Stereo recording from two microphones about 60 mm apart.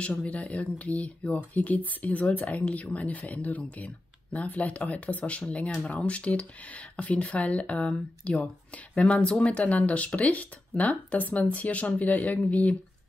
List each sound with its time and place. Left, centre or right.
0.2 s speech: left